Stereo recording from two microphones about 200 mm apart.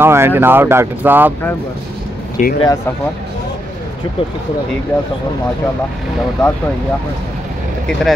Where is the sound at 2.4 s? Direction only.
35° left (ahead or behind).